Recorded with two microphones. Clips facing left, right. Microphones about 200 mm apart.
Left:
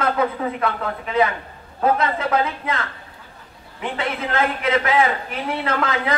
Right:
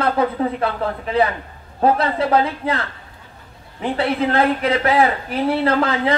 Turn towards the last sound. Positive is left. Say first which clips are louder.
# right 5 dB
turn(degrees=-30)  # may be behind; listen again after turning